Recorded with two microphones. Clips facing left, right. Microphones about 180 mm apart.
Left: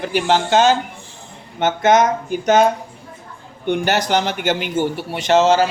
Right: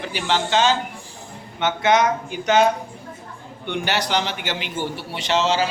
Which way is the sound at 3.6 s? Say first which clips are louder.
Left 6 dB; 45° left (ahead or behind).